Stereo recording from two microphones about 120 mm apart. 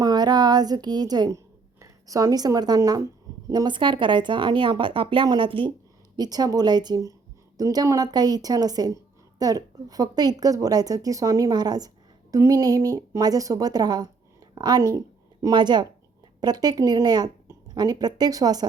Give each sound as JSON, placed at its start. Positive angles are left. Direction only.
{"t": 0.0, "sound": "a woman's voice", "side_deg": -35}
{"t": 6.1, "sound": "a woman's voice", "side_deg": -35}